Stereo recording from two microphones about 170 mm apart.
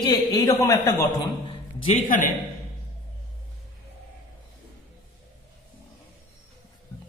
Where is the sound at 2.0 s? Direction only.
50° left (ahead or behind).